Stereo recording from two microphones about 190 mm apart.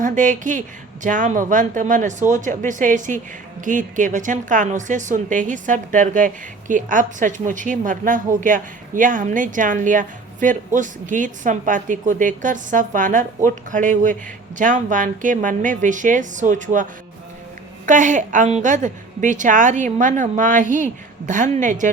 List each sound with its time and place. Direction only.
0.0 s a woman's voice: 40° right (ahead or behind)
17.8 s a woman's voice: 40° right (ahead or behind)